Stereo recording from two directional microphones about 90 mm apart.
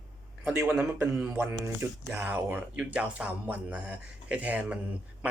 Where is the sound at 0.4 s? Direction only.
30° right (ahead or behind).